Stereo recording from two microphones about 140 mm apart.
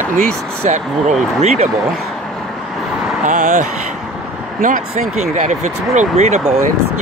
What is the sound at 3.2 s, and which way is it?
Speech, 65° right (ahead or behind).